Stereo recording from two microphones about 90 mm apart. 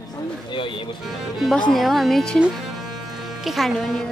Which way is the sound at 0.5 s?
65° left (ahead or behind).